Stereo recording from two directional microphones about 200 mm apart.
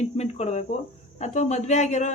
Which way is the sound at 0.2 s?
35° left (ahead or behind).